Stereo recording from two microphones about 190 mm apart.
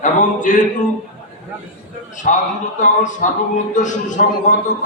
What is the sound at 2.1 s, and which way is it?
A man's voice, 40° left (ahead or behind).